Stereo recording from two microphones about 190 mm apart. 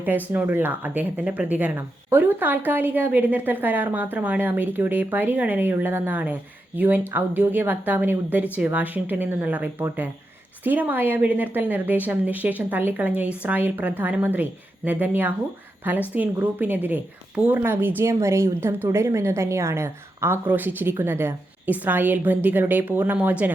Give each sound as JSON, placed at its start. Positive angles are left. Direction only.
{"t": 0.3, "sound": "a woman's voice", "side_deg": -10}